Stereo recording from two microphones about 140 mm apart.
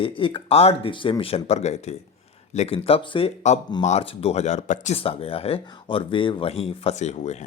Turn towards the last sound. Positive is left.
turn(degrees=55)  # may be behind; listen again after turning